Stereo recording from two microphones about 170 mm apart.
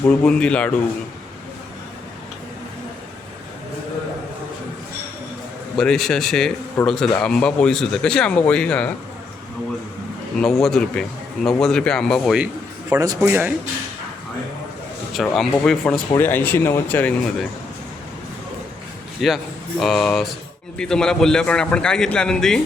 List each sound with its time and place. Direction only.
0.1 s speech: 5° left (ahead or behind)
5.7 s a man's voice: 5° left (ahead or behind)
10.4 s a man's voice: centre (ahead or behind)
13.0 s speech: 20° right (ahead or behind)
15.1 s a man's voice: centre (ahead or behind)
19.2 s a man's voice: centre (ahead or behind)